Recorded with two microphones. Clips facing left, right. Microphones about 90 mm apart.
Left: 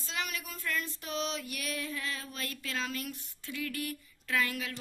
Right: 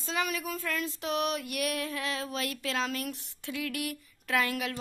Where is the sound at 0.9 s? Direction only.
70° right (ahead or behind).